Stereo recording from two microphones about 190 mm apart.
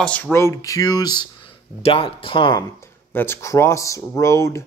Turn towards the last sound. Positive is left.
turn(degrees=15)  # may be behind; listen again after turning